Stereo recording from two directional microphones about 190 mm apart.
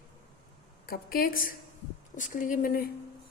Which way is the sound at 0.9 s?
50° left (ahead or behind).